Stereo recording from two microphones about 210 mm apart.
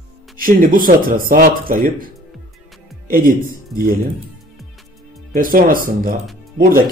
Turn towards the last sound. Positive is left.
turn(degrees=-45)  # may be behind; listen again after turning